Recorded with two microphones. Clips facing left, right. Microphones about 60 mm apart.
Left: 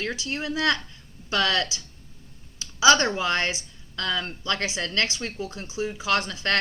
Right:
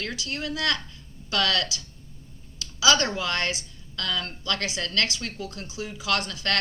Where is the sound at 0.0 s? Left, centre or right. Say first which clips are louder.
Left 2 dB; left.